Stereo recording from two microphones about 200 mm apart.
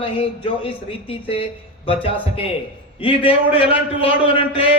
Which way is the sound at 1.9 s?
30° left (ahead or behind).